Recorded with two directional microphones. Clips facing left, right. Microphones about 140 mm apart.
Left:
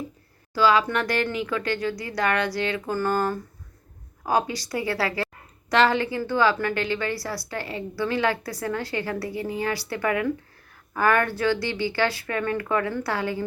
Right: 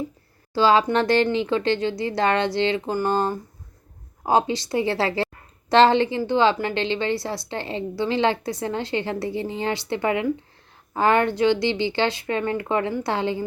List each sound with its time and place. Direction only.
0.5 s a woman's voice: 30° right (ahead or behind)